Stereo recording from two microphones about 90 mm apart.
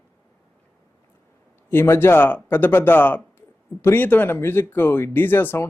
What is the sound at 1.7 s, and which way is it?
Speech, 25° left (ahead or behind).